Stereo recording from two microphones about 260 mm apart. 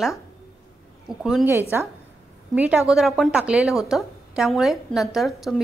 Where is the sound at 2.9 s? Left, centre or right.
Centre.